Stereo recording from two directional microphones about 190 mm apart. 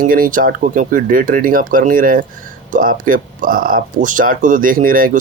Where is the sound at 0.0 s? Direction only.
45° right (ahead or behind).